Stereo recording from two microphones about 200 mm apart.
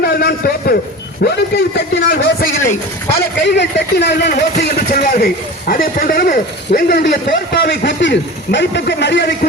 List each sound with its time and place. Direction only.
0.0 s a sound: 50° left (ahead or behind)
1.2 s a man's voice: 50° left (ahead or behind)
4.5 s a man's voice: 40° left (ahead or behind); by 9.5 s 55° left (ahead or behind)